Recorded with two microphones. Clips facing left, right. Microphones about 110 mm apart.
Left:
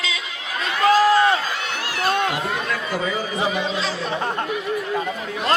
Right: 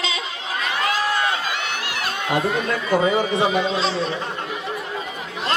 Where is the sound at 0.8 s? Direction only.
35° left (ahead or behind).